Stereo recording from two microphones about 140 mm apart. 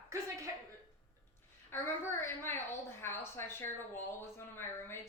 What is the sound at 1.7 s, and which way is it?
A woman's voice, 15° left (ahead or behind).